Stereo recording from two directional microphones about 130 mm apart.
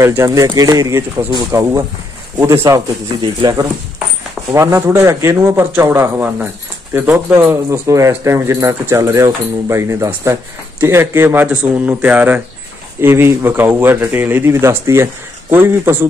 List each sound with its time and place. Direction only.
0.0 s speech: 25° right (ahead or behind)
3.2 s speech: 30° right (ahead or behind)
4.5 s speech: 20° right (ahead or behind)